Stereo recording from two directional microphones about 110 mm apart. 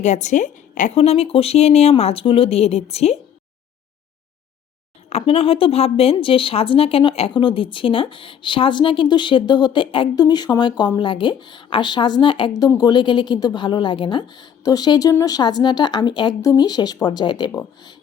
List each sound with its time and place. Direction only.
0.0 s a woman's voice: 90° left; by 3.2 s 70° left (ahead or behind)
5.0 s a woman's voice: 65° left (ahead or behind); by 10.1 s 50° left (ahead or behind)
10.2 s a woman's voice: 40° left (ahead or behind)
12.5 s a woman's voice: 35° left (ahead or behind)